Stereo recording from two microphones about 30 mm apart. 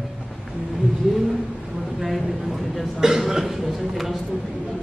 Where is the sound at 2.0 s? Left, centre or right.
Centre.